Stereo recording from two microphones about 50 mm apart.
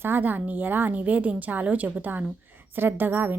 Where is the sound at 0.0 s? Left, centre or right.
Right.